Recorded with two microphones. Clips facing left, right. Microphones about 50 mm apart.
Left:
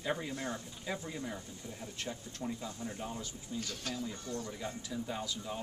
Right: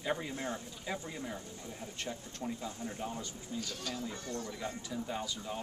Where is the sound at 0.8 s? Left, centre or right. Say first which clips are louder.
Even; centre.